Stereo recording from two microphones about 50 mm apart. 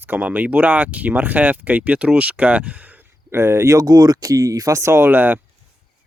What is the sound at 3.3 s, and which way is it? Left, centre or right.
Speech, right.